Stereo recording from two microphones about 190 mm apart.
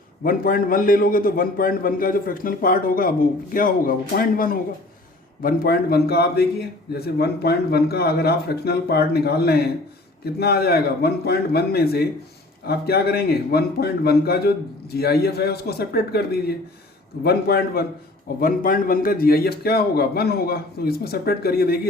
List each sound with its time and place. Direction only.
0.2 s a man's voice: 50° left (ahead or behind)